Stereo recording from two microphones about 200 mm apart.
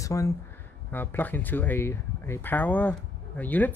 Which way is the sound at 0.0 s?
15° left (ahead or behind).